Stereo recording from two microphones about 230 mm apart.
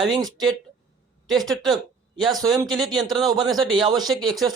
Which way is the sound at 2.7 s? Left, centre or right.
Centre.